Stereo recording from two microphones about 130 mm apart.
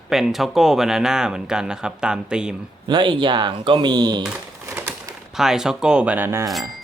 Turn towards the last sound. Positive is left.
turn(degrees=0)  # may be behind; listen again after turning